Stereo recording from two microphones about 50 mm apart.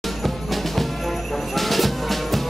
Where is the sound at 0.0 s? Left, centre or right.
Centre.